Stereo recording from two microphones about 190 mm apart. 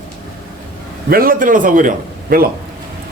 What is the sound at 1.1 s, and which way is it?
A man's voice, 50° right (ahead or behind).